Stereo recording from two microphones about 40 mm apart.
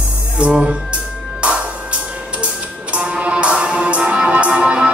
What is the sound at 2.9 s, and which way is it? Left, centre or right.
Music, right.